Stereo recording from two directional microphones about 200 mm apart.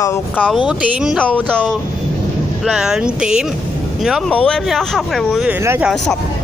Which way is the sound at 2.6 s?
5° right (ahead or behind).